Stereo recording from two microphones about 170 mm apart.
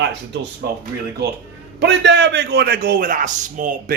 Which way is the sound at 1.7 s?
90° right.